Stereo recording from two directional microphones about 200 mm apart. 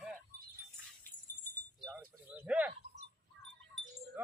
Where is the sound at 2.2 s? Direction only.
5° right (ahead or behind).